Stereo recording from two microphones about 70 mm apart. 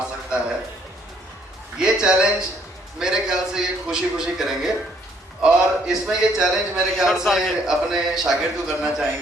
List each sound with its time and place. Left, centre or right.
1.8 s a man's voice: centre